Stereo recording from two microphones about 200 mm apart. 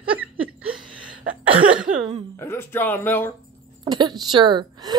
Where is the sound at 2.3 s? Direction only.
10° left (ahead or behind).